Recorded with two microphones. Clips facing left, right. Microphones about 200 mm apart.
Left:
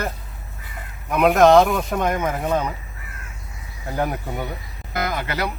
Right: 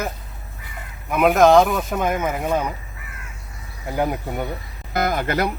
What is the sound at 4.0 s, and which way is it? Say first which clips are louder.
Speech: right 2 dB; 15° right (ahead or behind).